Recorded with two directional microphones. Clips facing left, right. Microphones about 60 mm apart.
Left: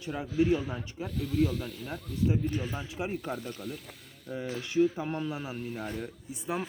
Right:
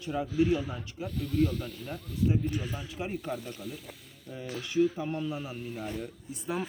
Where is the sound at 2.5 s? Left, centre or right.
Left.